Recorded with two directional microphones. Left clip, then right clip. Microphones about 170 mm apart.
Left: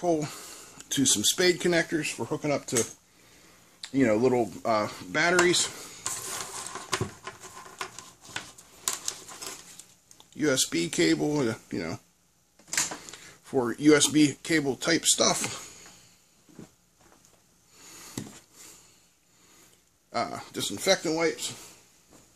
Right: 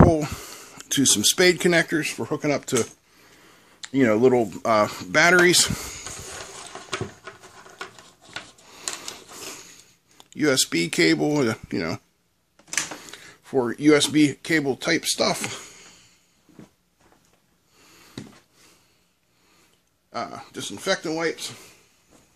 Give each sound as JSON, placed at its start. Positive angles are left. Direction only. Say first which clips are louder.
{"t": 0.0, "sound": "speech", "louder": "right 9 dB", "side_deg": -40}
{"t": 10.1, "sound": "speech", "louder": "right 5 dB", "side_deg": -45}
{"t": 12.6, "sound": "speech", "louder": "right 2 dB", "side_deg": -30}
{"t": 17.8, "sound": "a sound", "louder": "left 1 dB", "side_deg": 35}
{"t": 20.1, "sound": "speech", "louder": "left 1 dB", "side_deg": 15}
{"t": 21.1, "sound": "speech", "louder": "right 1 dB", "side_deg": -20}